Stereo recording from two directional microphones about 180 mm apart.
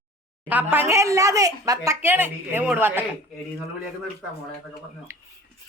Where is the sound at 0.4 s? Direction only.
10° right (ahead or behind).